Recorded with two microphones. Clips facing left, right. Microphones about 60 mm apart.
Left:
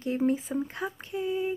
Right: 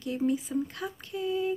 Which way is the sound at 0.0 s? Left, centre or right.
Left.